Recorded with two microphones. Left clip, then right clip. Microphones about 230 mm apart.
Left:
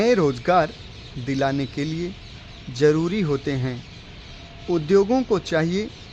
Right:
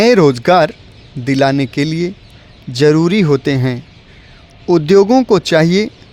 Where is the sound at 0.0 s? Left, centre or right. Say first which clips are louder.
Right 10 dB; right.